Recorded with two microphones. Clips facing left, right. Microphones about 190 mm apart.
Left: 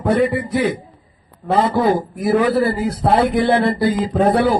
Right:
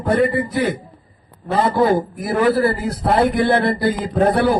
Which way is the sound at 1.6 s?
55° right (ahead or behind).